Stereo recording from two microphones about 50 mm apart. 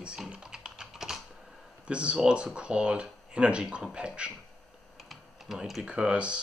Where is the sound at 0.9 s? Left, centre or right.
Centre.